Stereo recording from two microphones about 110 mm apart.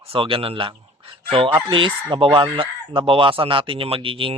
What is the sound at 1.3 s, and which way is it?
Chicken, 50° right (ahead or behind).